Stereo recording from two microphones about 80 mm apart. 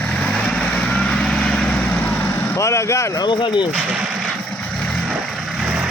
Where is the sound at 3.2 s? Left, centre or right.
Left.